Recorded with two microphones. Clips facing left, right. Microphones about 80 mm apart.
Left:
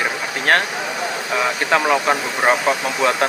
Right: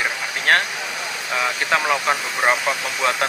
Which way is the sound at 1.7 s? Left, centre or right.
Centre.